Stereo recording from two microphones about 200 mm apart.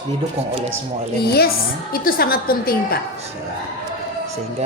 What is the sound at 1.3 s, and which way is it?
A woman's voice, 50° left (ahead or behind).